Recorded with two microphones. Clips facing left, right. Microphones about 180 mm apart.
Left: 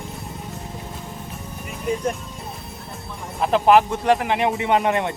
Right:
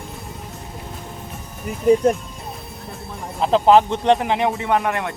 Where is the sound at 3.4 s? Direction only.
20° right (ahead or behind).